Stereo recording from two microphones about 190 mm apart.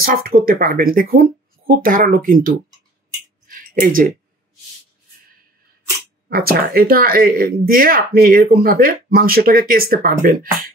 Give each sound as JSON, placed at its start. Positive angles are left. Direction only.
{"t": 0.0, "sound": "speech", "side_deg": -50}
{"t": 3.4, "sound": "a sound", "side_deg": -45}
{"t": 6.2, "sound": "speech", "side_deg": -50}